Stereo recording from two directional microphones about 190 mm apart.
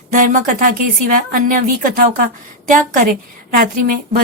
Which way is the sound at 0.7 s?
50° right (ahead or behind).